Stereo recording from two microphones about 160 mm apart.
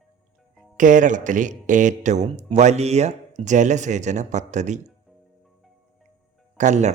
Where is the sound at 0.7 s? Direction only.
55° right (ahead or behind).